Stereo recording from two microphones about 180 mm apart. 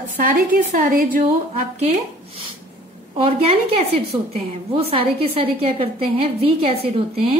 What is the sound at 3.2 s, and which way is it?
A woman's voice, 35° right (ahead or behind).